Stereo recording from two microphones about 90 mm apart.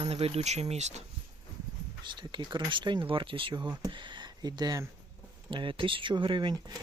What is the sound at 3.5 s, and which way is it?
Speech, 50° right (ahead or behind).